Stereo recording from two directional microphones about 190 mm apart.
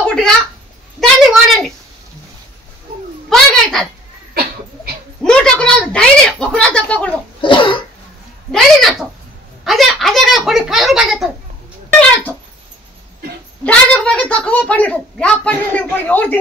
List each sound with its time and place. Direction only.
0.0 s a sound: 5° left (ahead or behind)
1.0 s a woman's voice: centre (ahead or behind)
3.3 s a sound: centre (ahead or behind)
4.3 s a sound: 55° right (ahead or behind)
5.2 s a woman's voice: 5° left (ahead or behind)
7.4 s cough: 25° left (ahead or behind)
8.5 s a woman's voice: centre (ahead or behind)
11.9 s speech: 10° left (ahead or behind)
13.7 s a woman's voice: 5° left (ahead or behind)